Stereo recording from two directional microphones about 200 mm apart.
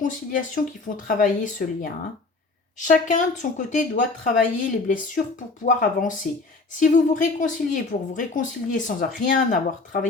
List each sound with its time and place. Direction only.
0.0 s a woman's voice: 40° left (ahead or behind)